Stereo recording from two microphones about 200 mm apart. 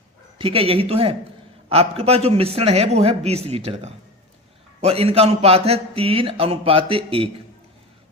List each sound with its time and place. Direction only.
0.3 s a man's voice: 25° right (ahead or behind)